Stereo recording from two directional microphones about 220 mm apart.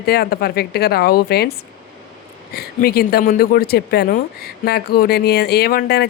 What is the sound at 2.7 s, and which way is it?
Speech, 45° left (ahead or behind).